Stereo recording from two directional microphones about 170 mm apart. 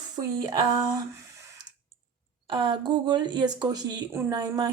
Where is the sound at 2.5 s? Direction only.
25° right (ahead or behind).